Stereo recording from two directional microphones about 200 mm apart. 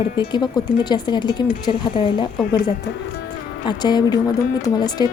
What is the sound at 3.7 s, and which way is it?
Speech, 20° left (ahead or behind).